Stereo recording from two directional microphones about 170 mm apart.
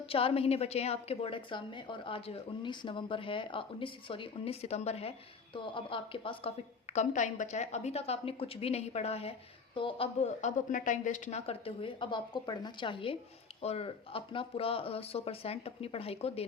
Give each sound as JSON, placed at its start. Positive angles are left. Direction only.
{"t": 0.1, "sound": "a woman's voice", "side_deg": 35}
{"t": 6.9, "sound": "a woman's voice", "side_deg": 45}
{"t": 10.4, "sound": "a woman's voice", "side_deg": 50}